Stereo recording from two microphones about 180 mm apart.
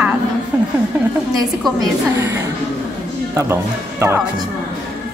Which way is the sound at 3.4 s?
15° right (ahead or behind).